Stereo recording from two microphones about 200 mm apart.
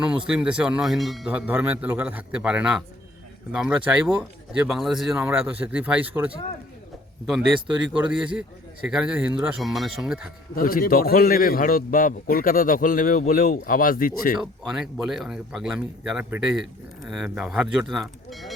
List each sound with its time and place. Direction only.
0.0 s a man's voice: 5° right (ahead or behind)
10.5 s a man's voice: 45° left (ahead or behind)
14.3 s speech: 5° right (ahead or behind)